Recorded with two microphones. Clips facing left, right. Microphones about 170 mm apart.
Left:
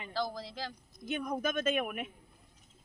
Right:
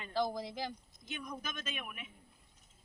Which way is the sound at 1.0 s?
55° left (ahead or behind).